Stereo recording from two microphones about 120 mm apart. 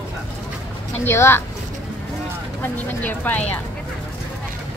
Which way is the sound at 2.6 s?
15° left (ahead or behind).